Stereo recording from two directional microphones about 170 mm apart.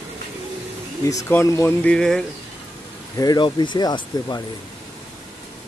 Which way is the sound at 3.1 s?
25° left (ahead or behind).